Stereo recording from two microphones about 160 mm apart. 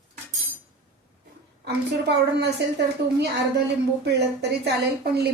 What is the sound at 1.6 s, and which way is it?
Speech, 90° right.